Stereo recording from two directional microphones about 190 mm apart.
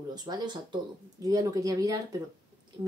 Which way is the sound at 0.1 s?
20° right (ahead or behind).